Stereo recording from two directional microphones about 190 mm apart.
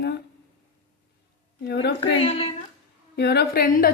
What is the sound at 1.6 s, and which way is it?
Speech, 60° left (ahead or behind).